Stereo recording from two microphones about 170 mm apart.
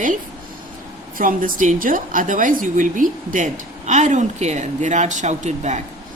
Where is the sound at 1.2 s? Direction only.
55° right (ahead or behind).